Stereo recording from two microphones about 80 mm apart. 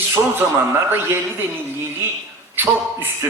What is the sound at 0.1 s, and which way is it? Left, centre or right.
A man's voice, right.